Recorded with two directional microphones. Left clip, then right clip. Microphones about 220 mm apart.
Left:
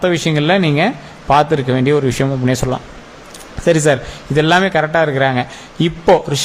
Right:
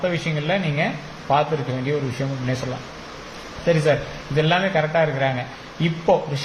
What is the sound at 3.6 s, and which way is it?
Speech, 45° left (ahead or behind).